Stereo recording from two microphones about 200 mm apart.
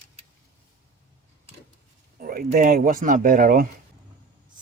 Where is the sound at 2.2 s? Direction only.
45° right (ahead or behind).